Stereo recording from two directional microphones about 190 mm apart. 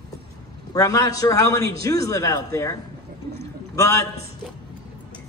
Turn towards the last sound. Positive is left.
turn(degrees=15)  # may be behind; listen again after turning